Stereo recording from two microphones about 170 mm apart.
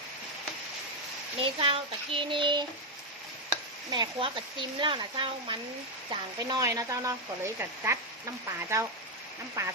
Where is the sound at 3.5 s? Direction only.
25° right (ahead or behind).